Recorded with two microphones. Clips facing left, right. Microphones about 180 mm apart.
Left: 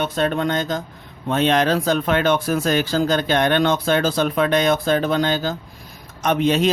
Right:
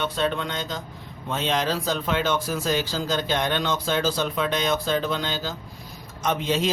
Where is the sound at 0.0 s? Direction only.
50° left (ahead or behind).